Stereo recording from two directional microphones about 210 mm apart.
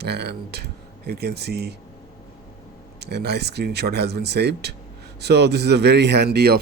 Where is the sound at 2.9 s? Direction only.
50° right (ahead or behind).